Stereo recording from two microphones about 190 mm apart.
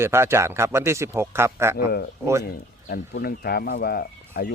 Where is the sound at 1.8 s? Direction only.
55° left (ahead or behind).